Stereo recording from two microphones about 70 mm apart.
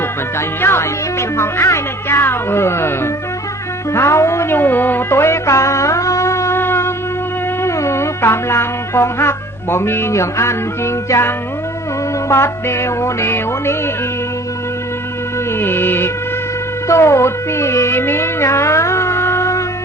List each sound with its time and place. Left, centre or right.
0.3 s speech: left
3.9 s music: left
12.3 s speech: left
15.5 s speech: left
16.9 s music: left